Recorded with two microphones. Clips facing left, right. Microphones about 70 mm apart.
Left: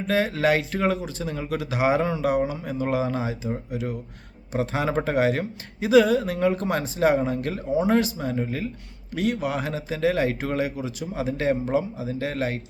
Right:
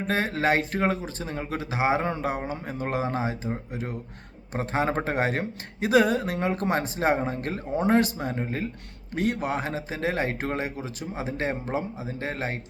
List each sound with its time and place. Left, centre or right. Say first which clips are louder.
0.1 s speech: left 3 dB; right
2.4 s speech: left 5 dB; right